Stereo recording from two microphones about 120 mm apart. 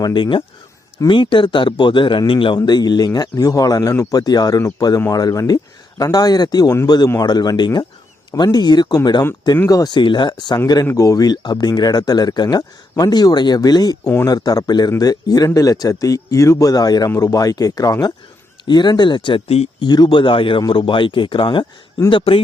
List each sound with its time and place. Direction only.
0.0 s speech: 40° left (ahead or behind); by 19.7 s 55° left (ahead or behind)
19.8 s speech: 40° left (ahead or behind)